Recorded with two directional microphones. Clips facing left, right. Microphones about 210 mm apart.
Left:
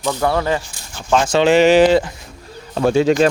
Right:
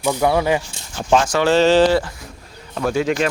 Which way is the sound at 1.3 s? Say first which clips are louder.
Left 3 dB; 25° left (ahead or behind).